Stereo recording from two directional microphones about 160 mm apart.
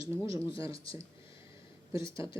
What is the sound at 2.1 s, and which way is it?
Speech, 30° left (ahead or behind).